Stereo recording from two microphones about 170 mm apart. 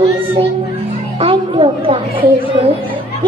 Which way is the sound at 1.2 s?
30° right (ahead or behind).